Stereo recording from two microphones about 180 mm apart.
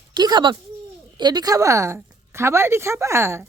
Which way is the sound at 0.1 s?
25° right (ahead or behind).